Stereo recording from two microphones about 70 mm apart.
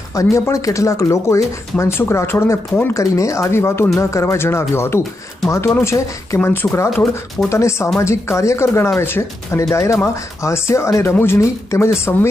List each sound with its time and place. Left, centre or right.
0.1 s speech: left
2.9 s speech: left
6.4 s speech: left
6.9 s speech: centre
7.5 s speech: left